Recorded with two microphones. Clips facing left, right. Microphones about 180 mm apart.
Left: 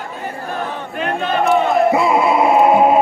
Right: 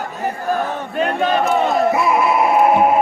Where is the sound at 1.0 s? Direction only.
40° right (ahead or behind).